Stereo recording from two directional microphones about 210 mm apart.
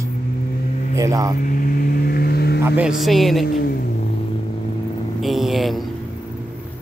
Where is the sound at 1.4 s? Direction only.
40° left (ahead or behind).